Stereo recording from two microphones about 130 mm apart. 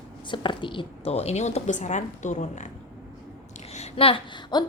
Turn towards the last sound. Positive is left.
turn(degrees=35)  # may be behind; listen again after turning